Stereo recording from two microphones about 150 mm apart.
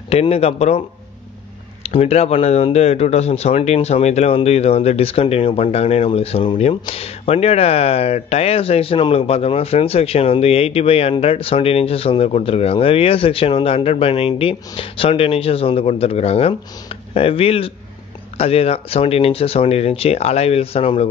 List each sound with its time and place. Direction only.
0.1 s speech: 40° left (ahead or behind)